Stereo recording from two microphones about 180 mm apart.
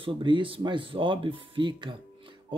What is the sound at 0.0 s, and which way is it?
Speech, 30° right (ahead or behind).